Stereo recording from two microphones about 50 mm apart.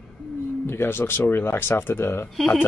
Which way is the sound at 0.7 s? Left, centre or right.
Left.